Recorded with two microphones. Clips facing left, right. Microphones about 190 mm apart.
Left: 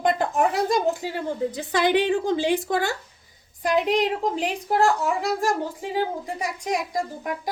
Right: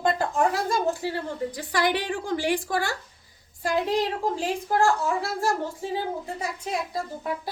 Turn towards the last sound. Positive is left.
turn(degrees=15)  # may be behind; listen again after turning